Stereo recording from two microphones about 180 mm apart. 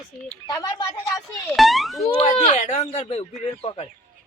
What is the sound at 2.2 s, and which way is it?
Speech, 40° left (ahead or behind).